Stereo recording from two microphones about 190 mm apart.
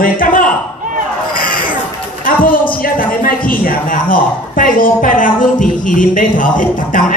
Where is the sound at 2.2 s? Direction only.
45° left (ahead or behind).